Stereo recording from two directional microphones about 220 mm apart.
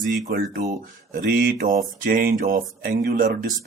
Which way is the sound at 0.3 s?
40° right (ahead or behind).